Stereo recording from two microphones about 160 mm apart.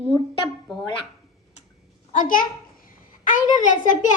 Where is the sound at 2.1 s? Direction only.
60° left (ahead or behind).